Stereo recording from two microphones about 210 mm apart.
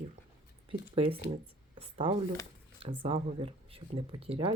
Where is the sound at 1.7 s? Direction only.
25° right (ahead or behind).